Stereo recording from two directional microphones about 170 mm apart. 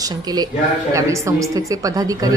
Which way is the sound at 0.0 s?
25° right (ahead or behind).